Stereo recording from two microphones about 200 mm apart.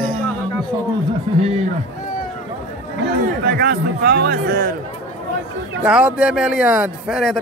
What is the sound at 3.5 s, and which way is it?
A man's voice, 55° right (ahead or behind).